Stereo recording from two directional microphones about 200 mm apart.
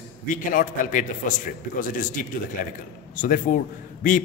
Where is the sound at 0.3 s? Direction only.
40° left (ahead or behind).